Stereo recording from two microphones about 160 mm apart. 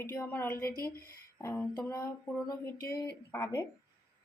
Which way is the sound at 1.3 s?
20° left (ahead or behind).